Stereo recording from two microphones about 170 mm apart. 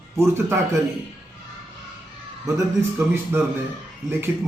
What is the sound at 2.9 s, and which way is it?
Speech, 15° right (ahead or behind).